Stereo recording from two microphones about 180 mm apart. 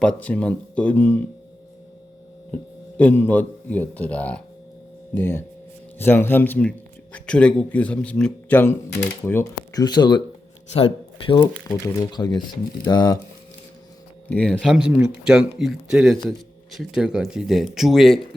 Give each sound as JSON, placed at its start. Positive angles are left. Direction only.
{"t": 0.0, "sound": "a man's voice", "side_deg": 5}
{"t": 3.0, "sound": "a man's voice", "side_deg": 10}
{"t": 9.8, "sound": "speech", "side_deg": 25}
{"t": 14.3, "sound": "speech", "side_deg": 10}